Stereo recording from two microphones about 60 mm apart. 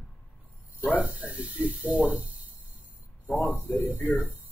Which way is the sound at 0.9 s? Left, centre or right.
Right.